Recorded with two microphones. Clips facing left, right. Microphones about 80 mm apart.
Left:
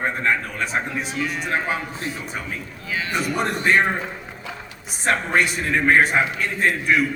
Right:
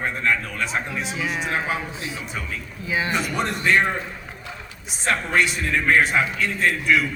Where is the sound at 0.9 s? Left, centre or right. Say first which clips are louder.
Left 1 dB; centre.